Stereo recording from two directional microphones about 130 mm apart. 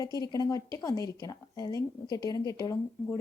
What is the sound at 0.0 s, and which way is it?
A woman's voice, 30° left (ahead or behind).